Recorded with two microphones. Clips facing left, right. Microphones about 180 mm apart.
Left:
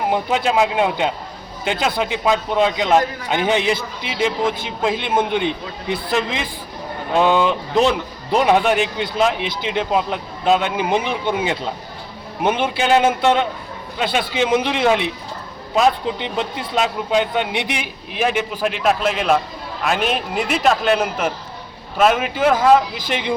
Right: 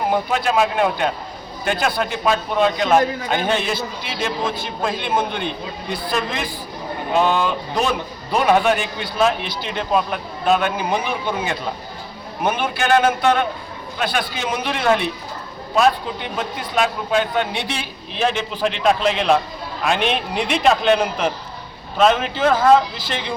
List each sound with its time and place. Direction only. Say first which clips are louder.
0.1 s a man's voice: left 2 dB; 20° left (ahead or behind)